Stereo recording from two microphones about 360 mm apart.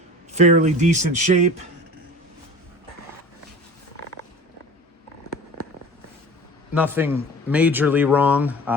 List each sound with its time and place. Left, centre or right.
0.3 s speech: centre
6.7 s speech: centre